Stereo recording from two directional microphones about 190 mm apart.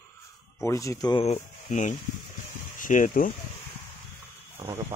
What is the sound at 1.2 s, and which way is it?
Speech, 35° left (ahead or behind).